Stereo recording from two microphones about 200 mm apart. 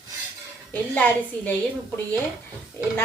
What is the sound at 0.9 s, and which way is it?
Speech, 10° left (ahead or behind).